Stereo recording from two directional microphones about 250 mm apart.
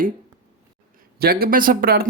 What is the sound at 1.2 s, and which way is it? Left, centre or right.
Speech, right.